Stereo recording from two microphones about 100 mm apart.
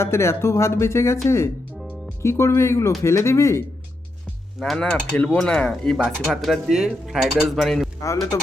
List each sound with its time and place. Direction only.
0.0 s speech: 30° left (ahead or behind)
4.6 s speech: 10° left (ahead or behind)